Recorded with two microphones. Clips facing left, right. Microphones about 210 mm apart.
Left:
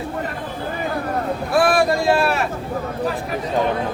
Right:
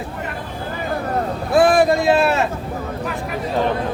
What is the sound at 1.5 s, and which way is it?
Vehicle, 20° right (ahead or behind).